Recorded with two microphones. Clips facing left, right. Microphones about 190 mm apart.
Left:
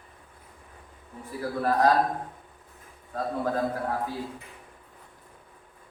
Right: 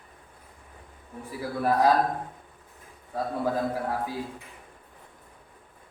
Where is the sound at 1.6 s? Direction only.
15° right (ahead or behind).